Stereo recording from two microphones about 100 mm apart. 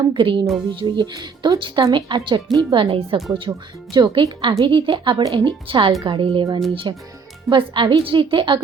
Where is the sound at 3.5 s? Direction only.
45° right (ahead or behind).